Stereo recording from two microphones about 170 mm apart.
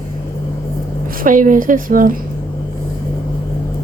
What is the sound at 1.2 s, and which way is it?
Speech, 50° right (ahead or behind).